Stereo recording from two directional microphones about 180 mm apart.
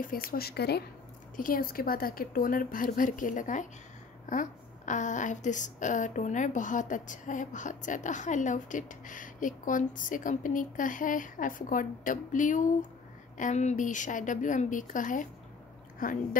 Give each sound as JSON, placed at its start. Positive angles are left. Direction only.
{"t": 0.0, "sound": "speech", "side_deg": 50}
{"t": 1.3, "sound": "a woman's voice", "side_deg": 50}